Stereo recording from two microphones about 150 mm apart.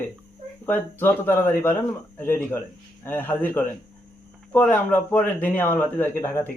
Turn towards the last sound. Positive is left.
turn(degrees=15)  # may be behind; listen again after turning